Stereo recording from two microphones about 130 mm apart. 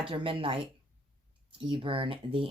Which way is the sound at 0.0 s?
45° right (ahead or behind).